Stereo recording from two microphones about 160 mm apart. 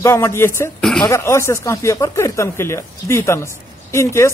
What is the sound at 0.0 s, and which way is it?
A man's voice, 15° left (ahead or behind).